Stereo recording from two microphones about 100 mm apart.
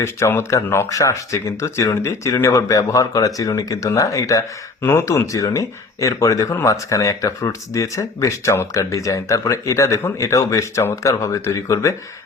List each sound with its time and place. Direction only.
0.0 s speech: 25° left (ahead or behind)
4.8 s speech: 25° left (ahead or behind)